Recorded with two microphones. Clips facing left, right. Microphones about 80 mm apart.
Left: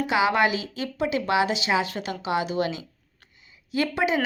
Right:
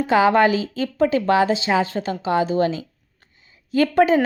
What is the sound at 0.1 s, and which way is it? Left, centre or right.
Speech, right.